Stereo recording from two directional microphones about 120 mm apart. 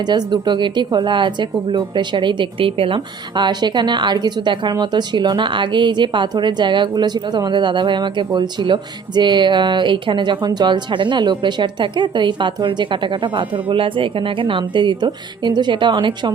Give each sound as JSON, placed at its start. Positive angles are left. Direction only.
{"t": 0.0, "sound": "speech", "side_deg": -35}